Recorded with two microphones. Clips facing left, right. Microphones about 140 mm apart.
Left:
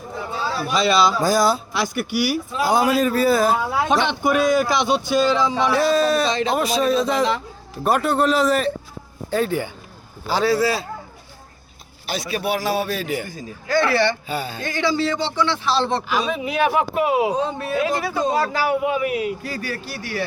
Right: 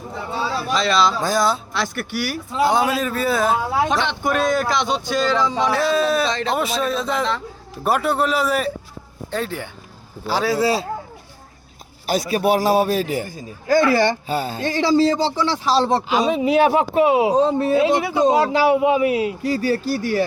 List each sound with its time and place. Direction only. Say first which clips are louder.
0.7 s speech: left 1 dB; 5° left (ahead or behind)
2.5 s speech: right 2 dB; 25° right (ahead or behind)
3.0 s speech: left 3 dB; 5° left (ahead or behind)
5.9 s speech: left 1 dB; centre (ahead or behind)
6.3 s speech: left 1 dB; 15° left (ahead or behind)
6.6 s speech: left 3 dB; centre (ahead or behind)
9.3 s speech: left 5 dB; 5° left (ahead or behind)
10.2 s a man's voice: left 1 dB; 5° right (ahead or behind)
10.6 s speech: right 2 dB; 30° right (ahead or behind)
12.0 s speech: right 6 dB; 45° right (ahead or behind)
13.8 s speech: right 2 dB; 45° right (ahead or behind)